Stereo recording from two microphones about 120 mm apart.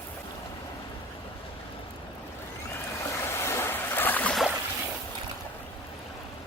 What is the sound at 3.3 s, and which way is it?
Boat, 20° left (ahead or behind).